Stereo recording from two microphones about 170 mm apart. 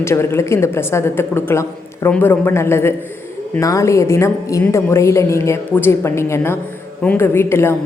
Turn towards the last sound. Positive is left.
turn(degrees=15)  # may be behind; listen again after turning